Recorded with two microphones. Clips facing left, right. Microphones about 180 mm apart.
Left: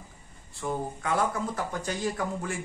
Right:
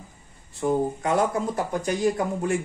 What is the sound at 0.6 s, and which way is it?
Speech, 20° right (ahead or behind).